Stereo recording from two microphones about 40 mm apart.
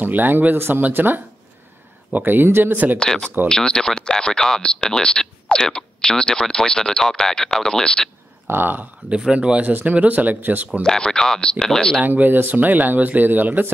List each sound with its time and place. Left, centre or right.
0.0 s speech: right
3.0 s speech: centre
8.5 s speech: right
9.3 s speech: right
9.7 s speech: right
10.8 s speech: centre
12.0 s speech: right